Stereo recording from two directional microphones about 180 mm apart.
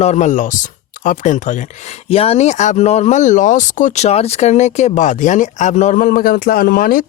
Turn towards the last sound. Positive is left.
turn(degrees=55)  # may be behind; listen again after turning